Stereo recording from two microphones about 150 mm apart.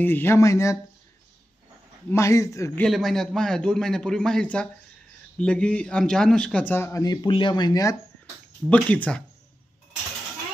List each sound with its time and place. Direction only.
0.0 s speech: 15° left (ahead or behind)
2.0 s speech: 20° left (ahead or behind)
2.8 s a man's voice: centre (ahead or behind); by 8.0 s 25° left (ahead or behind)
8.6 s a man's voice: 10° left (ahead or behind)